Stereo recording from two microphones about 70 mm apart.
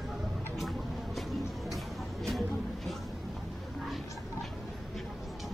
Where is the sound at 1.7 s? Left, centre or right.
Centre.